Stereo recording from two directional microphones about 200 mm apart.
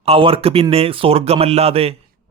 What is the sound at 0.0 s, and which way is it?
A man's voice, 30° right (ahead or behind).